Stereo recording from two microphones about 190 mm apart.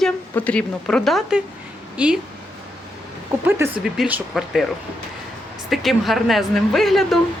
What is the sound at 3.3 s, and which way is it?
Speech, 10° right (ahead or behind).